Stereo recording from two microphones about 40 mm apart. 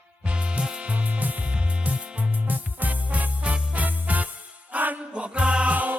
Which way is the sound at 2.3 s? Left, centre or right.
Right.